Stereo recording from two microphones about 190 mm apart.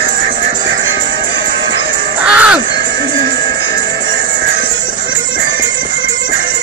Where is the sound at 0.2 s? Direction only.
70° right (ahead or behind).